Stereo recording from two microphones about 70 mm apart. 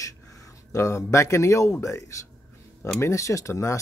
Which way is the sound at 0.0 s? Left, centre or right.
Left.